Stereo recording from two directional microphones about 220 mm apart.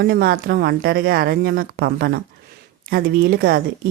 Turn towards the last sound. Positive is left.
turn(degrees=-45)  # may be behind; listen again after turning